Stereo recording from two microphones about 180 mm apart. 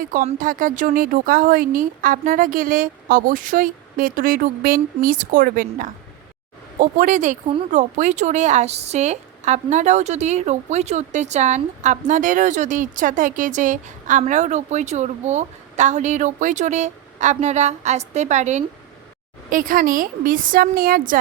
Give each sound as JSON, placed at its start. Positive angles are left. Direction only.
{"t": 0.3, "sound": "a woman's voice", "side_deg": -45}